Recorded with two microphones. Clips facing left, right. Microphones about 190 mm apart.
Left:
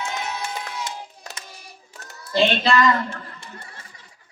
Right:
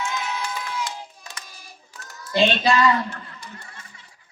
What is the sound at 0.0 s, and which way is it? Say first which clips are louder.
Crowd: right 1 dB; 40° left (ahead or behind).